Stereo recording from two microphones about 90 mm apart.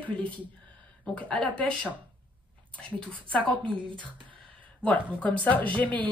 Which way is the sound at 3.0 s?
15° left (ahead or behind).